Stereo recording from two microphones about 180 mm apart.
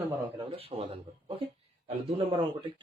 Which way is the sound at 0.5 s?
30° right (ahead or behind).